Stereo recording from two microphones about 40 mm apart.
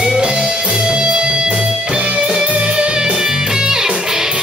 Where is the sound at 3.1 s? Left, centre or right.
Centre.